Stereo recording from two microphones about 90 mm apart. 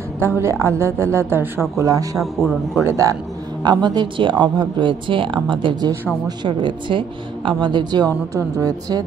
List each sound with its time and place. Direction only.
0.2 s a woman's voice: 30° right (ahead or behind)
2.1 s a man's voice: centre (ahead or behind)
2.8 s a woman's voice: 35° right (ahead or behind)
3.6 s speech: 50° right (ahead or behind)
8.4 s a woman's voice: 40° right (ahead or behind)